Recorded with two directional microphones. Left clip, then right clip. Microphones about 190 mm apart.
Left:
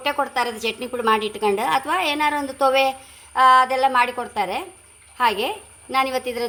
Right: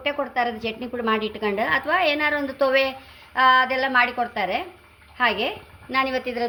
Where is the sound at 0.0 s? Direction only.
55° left (ahead or behind).